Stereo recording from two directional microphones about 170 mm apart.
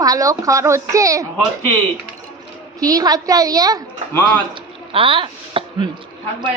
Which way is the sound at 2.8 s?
20° right (ahead or behind).